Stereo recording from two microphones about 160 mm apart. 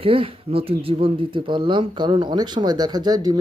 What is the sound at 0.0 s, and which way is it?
Speech, 35° right (ahead or behind).